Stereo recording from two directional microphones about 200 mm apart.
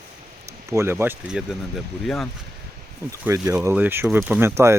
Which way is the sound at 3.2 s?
10° right (ahead or behind).